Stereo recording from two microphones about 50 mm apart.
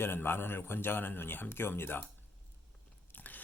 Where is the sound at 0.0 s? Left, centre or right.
Left.